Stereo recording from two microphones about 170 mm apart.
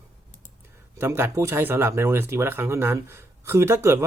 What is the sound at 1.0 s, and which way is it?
Speech, 15° right (ahead or behind).